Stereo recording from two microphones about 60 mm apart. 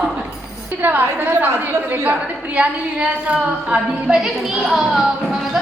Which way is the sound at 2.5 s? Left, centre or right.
Centre.